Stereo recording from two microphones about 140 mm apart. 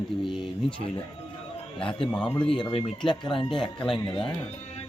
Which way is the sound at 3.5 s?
5° left (ahead or behind).